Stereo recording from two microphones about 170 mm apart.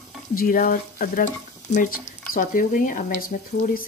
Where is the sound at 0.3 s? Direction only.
55° left (ahead or behind).